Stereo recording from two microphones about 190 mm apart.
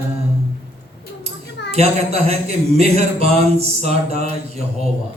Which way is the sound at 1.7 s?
35° right (ahead or behind).